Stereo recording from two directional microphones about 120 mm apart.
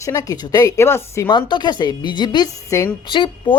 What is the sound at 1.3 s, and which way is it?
Speech, 40° left (ahead or behind).